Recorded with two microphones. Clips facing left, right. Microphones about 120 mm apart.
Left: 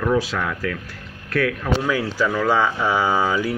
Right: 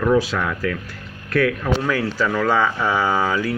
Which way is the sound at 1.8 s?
10° left (ahead or behind).